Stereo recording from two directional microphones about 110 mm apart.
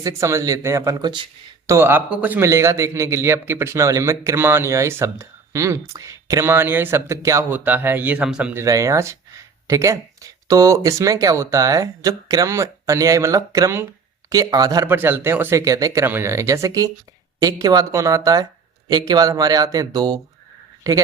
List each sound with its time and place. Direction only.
0.0 s a man's voice: 25° right (ahead or behind); by 1.3 s 45° right (ahead or behind)
1.6 s a man's voice: 25° right (ahead or behind)
6.4 s a man's voice: 20° right (ahead or behind)
8.5 s a man's voice: 30° right (ahead or behind)
14.8 s a man's voice: 20° right (ahead or behind); by 20.1 s 35° right (ahead or behind)